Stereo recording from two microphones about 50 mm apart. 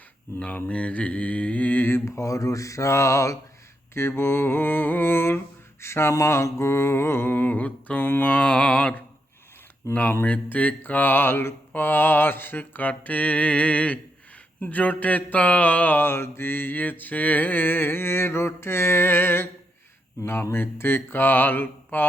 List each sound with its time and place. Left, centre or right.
0.3 s mantra: left
2.0 s speech: left
3.9 s mantra: left
9.8 s speech: left
10.2 s mantra: left